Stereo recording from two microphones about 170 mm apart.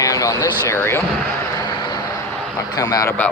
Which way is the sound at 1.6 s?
25° left (ahead or behind).